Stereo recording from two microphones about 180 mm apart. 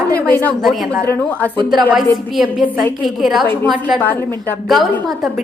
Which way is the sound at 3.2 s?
Centre (ahead or behind).